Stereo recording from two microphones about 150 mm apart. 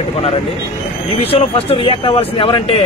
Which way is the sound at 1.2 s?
40° left (ahead or behind).